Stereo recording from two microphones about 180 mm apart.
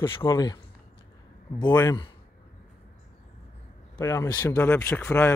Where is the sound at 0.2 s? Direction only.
20° left (ahead or behind).